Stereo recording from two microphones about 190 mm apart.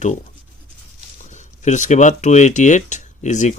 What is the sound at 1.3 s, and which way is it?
Speech, 40° left (ahead or behind).